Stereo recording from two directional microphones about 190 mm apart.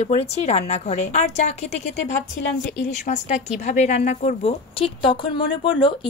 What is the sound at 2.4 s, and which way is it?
Speech, 70° left (ahead or behind).